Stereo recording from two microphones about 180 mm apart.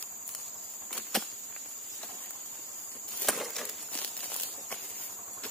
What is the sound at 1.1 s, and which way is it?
Insect, centre (ahead or behind).